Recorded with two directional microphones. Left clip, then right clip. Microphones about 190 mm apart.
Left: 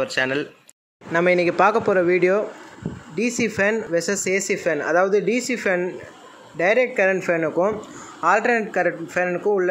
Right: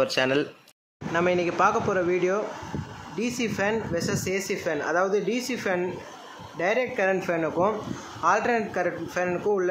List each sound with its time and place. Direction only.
0.0 s speech: 5° left (ahead or behind)
1.1 s speech: 20° left (ahead or behind)
8.2 s speech: 20° left (ahead or behind)